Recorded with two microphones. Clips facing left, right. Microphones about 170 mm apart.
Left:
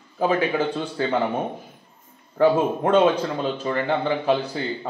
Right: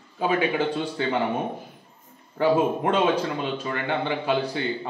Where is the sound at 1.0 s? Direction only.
40° left (ahead or behind).